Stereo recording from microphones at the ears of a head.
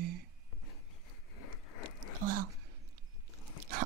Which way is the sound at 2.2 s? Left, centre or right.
Right.